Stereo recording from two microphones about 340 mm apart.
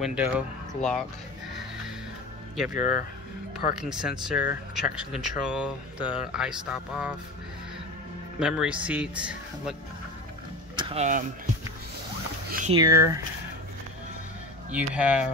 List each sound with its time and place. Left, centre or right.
0.0 s speech: centre
2.7 s speech: left
3.7 s speech: centre
8.4 s speech: centre
10.8 s speech: centre
12.4 s speech: right
12.7 s speech: centre
14.7 s speech: centre